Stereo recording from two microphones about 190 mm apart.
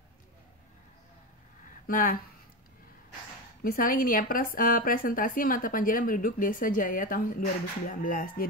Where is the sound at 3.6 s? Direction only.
50° left (ahead or behind).